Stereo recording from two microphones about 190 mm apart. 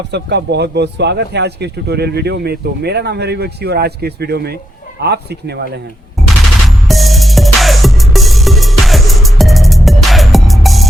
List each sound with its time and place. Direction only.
0.1 s speech: 65° right (ahead or behind)
6.7 s music: centre (ahead or behind)